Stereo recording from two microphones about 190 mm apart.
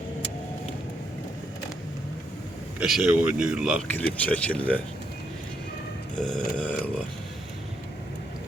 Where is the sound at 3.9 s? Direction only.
10° left (ahead or behind).